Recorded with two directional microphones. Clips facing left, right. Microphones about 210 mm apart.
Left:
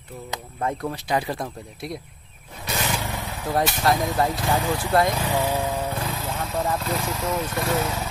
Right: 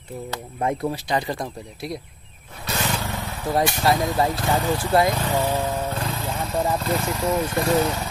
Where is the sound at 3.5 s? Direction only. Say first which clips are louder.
Right 1 dB; 5° right (ahead or behind).